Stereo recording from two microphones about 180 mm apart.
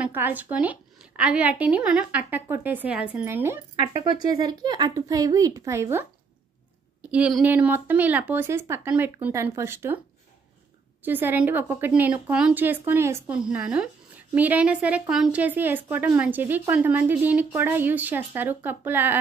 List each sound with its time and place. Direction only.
0.0 s a woman's voice: 10° right (ahead or behind)
3.9 s a woman's voice: 25° right (ahead or behind)
11.1 s a woman's voice: 10° right (ahead or behind)